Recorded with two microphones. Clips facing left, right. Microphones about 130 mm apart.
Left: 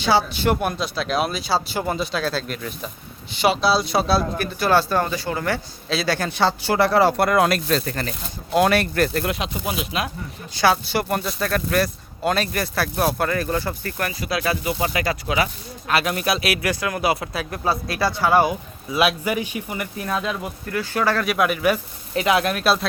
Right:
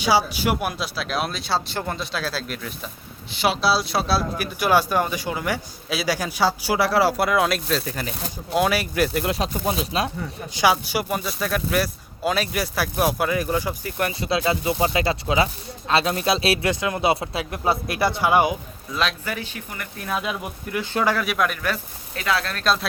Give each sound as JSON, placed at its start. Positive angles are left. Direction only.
{"t": 0.0, "sound": "speech", "side_deg": -10}
{"t": 4.6, "sound": "speech", "side_deg": -10}
{"t": 9.3, "sound": "speech", "side_deg": -35}
{"t": 10.5, "sound": "speech", "side_deg": -15}
{"t": 14.1, "sound": "speech", "side_deg": -30}
{"t": 18.9, "sound": "speech", "side_deg": 10}
{"t": 20.1, "sound": "speech", "side_deg": -5}
{"t": 20.4, "sound": "speech", "side_deg": -15}
{"t": 21.2, "sound": "speech", "side_deg": 0}
{"t": 22.6, "sound": "speech", "side_deg": 5}